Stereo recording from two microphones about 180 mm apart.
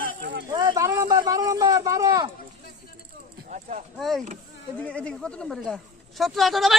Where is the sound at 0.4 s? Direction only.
20° right (ahead or behind).